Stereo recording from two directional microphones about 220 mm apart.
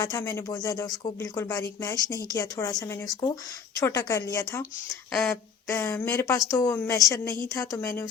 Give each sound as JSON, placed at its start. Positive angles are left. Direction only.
{"t": 0.0, "sound": "speech", "side_deg": 15}
{"t": 5.1, "sound": "speech", "side_deg": 5}